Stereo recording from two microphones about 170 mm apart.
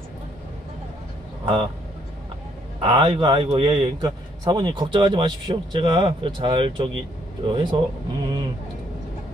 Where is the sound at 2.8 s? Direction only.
30° right (ahead or behind).